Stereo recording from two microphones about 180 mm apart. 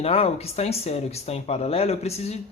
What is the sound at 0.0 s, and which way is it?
Speech, 35° left (ahead or behind).